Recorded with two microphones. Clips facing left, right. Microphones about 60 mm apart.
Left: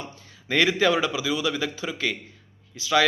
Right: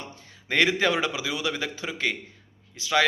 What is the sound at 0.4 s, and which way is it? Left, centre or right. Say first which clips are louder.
A man's voice: left 2 dB; right.